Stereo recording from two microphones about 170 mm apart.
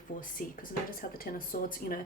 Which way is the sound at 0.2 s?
55° left (ahead or behind).